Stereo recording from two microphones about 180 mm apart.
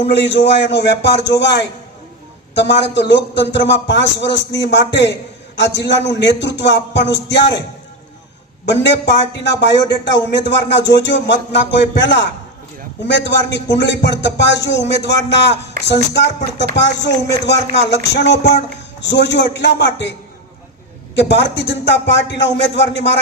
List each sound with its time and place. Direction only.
0.1 s a man's voice: 75° left (ahead or behind)
8.6 s a man's voice: 70° left (ahead or behind)
21.2 s a man's voice: 70° left (ahead or behind)